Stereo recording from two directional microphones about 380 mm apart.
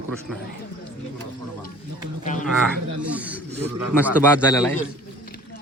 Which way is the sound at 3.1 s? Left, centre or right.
Centre.